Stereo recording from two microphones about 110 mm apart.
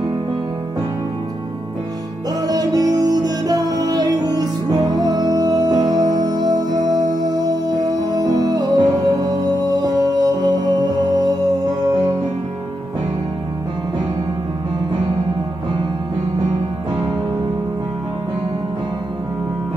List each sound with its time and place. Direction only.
2.4 s music: 35° right (ahead or behind)